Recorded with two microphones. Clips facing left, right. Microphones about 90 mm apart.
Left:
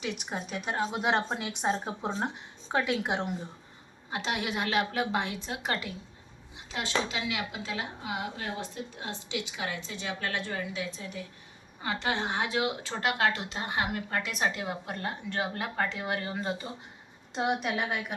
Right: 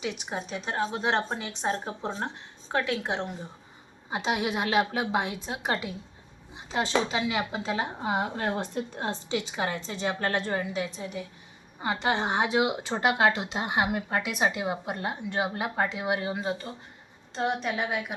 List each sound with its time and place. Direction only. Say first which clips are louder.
0.0 s a woman's voice: right 2 dB; centre (ahead or behind)
4.1 s a woman's voice: right 4 dB; 10° right (ahead or behind); by 9.1 s 50° right (ahead or behind)
9.5 s speech: right 5 dB; 30° right (ahead or behind)
10.8 s a woman's voice: right 4 dB; 20° right (ahead or behind)
17.3 s a woman's voice: right 1 dB; 10° left (ahead or behind)